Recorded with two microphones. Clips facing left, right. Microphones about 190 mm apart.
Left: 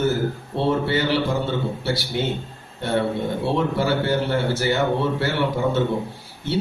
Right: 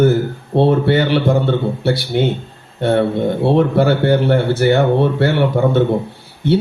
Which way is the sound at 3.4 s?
60° right (ahead or behind).